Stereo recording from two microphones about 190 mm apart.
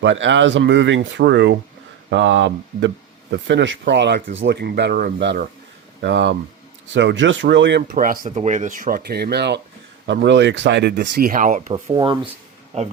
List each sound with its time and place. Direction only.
0.0 s speech: 75° right (ahead or behind)
6.0 s speech: 70° right (ahead or behind)
7.8 s speech: 50° right (ahead or behind)
11.7 s speech: 25° right (ahead or behind)